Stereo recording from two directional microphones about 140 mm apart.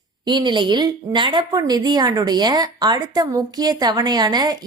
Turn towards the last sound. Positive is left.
turn(degrees=-30)  # may be behind; listen again after turning